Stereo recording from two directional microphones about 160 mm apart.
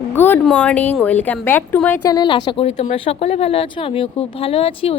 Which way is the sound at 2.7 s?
45° left (ahead or behind).